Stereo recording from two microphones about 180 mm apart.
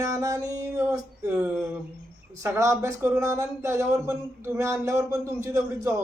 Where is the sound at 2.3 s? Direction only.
15° right (ahead or behind).